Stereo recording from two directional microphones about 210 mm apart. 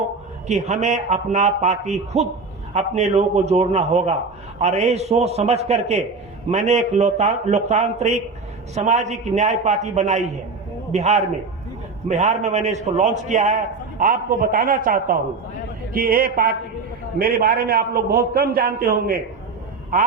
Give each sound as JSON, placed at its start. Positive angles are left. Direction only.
{"t": 0.4, "sound": "a man's voice", "side_deg": -35}